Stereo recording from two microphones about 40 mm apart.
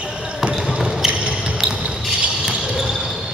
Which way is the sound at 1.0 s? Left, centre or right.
Centre.